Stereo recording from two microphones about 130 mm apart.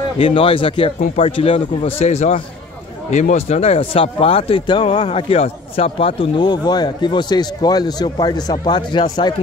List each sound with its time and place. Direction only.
0.2 s speech: 45° left (ahead or behind)
4.9 s speech: 50° left (ahead or behind); by 9.3 s 35° left (ahead or behind)